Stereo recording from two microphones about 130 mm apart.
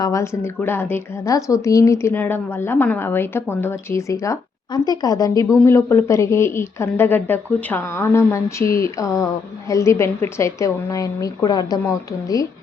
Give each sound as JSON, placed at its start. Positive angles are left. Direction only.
{"t": 0.0, "sound": "a woman's voice", "side_deg": 25}